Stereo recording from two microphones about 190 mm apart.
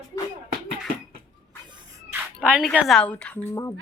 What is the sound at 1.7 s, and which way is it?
Music, 20° right (ahead or behind).